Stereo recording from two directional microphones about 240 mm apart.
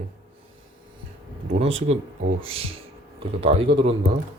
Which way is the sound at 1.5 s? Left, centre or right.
Right.